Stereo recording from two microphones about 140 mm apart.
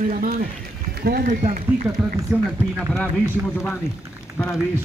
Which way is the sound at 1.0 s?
90° right.